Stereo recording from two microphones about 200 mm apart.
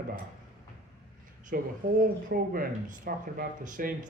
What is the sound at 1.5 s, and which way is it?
Speech, 45° right (ahead or behind).